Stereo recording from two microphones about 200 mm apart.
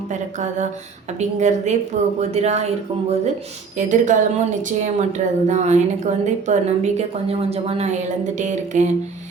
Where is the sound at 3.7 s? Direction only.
40° right (ahead or behind).